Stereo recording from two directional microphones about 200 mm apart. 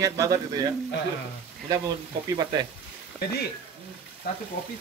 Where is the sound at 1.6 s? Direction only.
20° right (ahead or behind).